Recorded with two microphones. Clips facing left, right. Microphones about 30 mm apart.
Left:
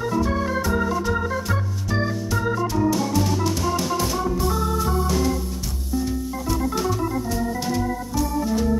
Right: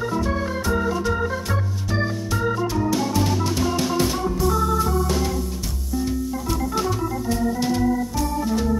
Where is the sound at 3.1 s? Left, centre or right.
Centre.